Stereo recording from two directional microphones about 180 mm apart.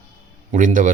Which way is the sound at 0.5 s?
45° right (ahead or behind).